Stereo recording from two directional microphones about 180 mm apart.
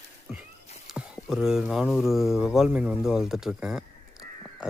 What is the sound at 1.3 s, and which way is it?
Speech, 5° right (ahead or behind).